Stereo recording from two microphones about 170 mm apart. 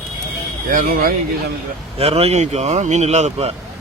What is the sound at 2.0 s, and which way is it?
Speech, 35° right (ahead or behind).